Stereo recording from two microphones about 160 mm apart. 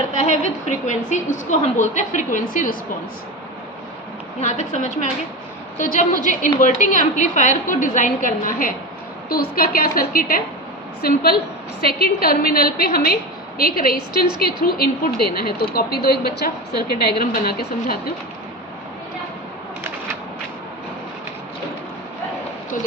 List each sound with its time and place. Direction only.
0.6 s a woman's voice: 50° left (ahead or behind)
4.4 s a woman's voice: 50° left (ahead or behind); by 10.4 s 65° left (ahead or behind)
11.0 s a woman's voice: 75° left (ahead or behind)